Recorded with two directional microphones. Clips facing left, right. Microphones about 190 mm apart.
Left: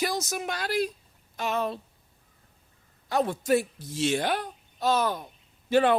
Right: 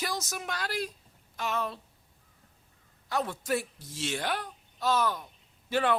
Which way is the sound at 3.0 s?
20° left (ahead or behind).